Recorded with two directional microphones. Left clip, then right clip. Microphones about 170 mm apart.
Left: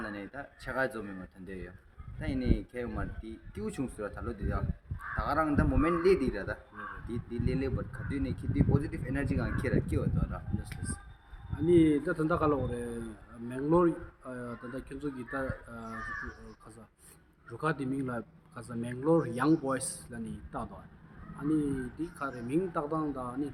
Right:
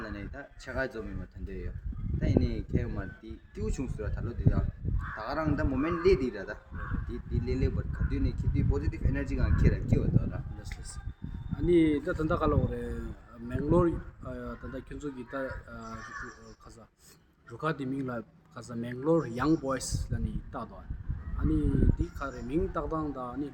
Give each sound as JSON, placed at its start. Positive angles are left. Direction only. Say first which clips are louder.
{"t": 0.0, "sound": "speech", "louder": "left 1 dB", "side_deg": 25}
{"t": 2.2, "sound": "speech", "louder": "right 3 dB", "side_deg": 25}
{"t": 11.6, "sound": "a man's voice", "louder": "even", "side_deg": -10}
{"t": 17.5, "sound": "a man's voice", "louder": "even", "side_deg": -10}